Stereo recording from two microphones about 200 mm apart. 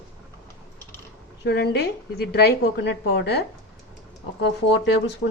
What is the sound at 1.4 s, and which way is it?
A woman's voice, 55° left (ahead or behind).